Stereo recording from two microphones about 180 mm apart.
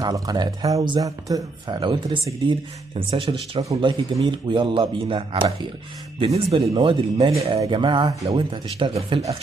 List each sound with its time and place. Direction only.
0.0 s speech: 20° right (ahead or behind)